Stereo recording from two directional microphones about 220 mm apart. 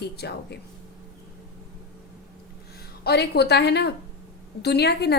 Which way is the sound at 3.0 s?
50° left (ahead or behind).